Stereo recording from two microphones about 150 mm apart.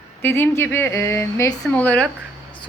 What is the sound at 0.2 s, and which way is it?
A woman's voice, 15° left (ahead or behind).